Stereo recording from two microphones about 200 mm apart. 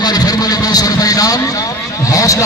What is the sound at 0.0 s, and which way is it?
Vehicle, 20° left (ahead or behind).